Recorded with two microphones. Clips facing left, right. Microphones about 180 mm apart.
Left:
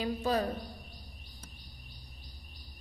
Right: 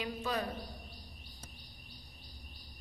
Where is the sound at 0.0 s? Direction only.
35° left (ahead or behind).